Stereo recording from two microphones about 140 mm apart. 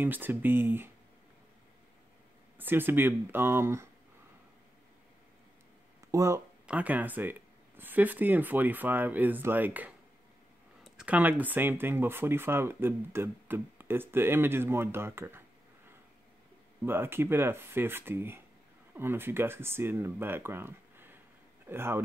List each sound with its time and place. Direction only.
0.0 s speech: 15° right (ahead or behind)
2.5 s speech: 15° right (ahead or behind)
6.1 s speech: 20° right (ahead or behind)
6.6 s speech: 10° right (ahead or behind)
16.8 s speech: 15° right (ahead or behind)